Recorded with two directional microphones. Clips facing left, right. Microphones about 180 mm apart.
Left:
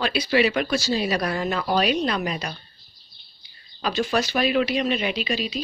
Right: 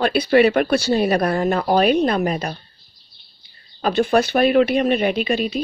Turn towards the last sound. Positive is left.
turn(degrees=-55)  # may be behind; listen again after turning